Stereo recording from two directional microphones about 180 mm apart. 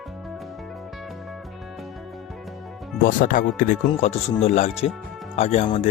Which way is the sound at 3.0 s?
50° left (ahead or behind).